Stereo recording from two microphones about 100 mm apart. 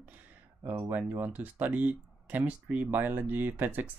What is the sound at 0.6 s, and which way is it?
Speech, 25° right (ahead or behind).